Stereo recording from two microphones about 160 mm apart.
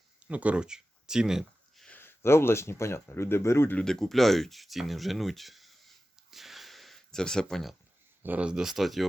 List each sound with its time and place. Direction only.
0.2 s a sound: 10° right (ahead or behind)
2.0 s speech: 15° left (ahead or behind)
8.2 s speech: 10° right (ahead or behind)